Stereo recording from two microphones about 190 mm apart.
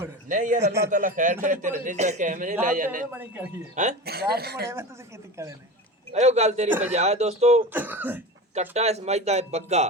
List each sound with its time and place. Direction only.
0.3 s a man's voice: 45° right (ahead or behind)
3.1 s a woman's voice: 10° right (ahead or behind)
4.0 s speech: 55° right (ahead or behind)
4.7 s a woman's voice: 15° right (ahead or behind)
6.1 s speech: 35° right (ahead or behind)
6.7 s a woman's voice: 10° right (ahead or behind)
6.9 s speech: 35° right (ahead or behind)
7.7 s a woman's voice: 10° right (ahead or behind)
8.7 s speech: 35° right (ahead or behind)